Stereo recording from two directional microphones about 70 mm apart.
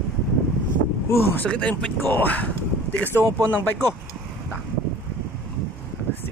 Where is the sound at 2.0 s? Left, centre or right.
Left.